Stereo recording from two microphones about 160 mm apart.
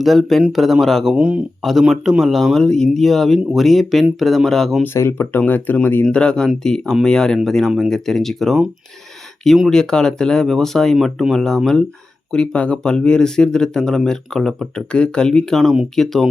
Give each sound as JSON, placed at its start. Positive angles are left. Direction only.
{"t": 0.0, "sound": "speech", "side_deg": 0}
{"t": 4.9, "sound": "speech", "side_deg": 15}